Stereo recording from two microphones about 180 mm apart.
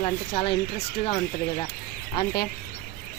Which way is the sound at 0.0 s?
35° left (ahead or behind).